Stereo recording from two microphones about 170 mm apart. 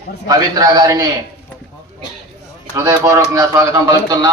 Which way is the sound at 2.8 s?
15° right (ahead or behind).